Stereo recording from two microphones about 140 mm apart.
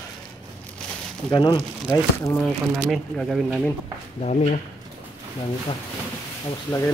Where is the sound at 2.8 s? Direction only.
Centre (ahead or behind).